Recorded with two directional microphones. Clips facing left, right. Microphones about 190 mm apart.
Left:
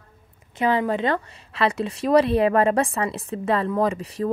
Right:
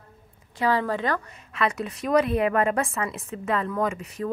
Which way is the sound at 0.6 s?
20° left (ahead or behind).